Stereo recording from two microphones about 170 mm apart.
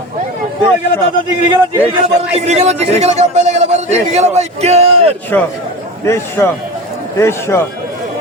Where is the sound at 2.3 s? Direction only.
40° right (ahead or behind).